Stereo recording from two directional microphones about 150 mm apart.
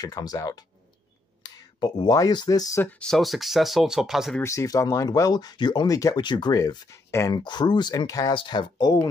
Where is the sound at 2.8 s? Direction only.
5° left (ahead or behind).